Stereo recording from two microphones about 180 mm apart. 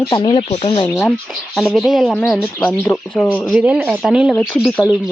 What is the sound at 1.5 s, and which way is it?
Speech, centre (ahead or behind).